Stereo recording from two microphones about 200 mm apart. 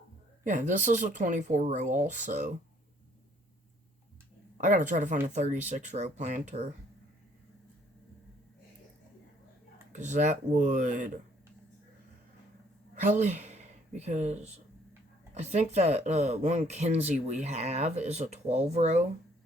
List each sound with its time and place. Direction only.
0.4 s speech: 40° right (ahead or behind)
4.5 s speech: 40° right (ahead or behind)
9.9 s speech: 35° right (ahead or behind)
13.2 s a sound: 35° right (ahead or behind)
14.0 s speech: 35° right (ahead or behind)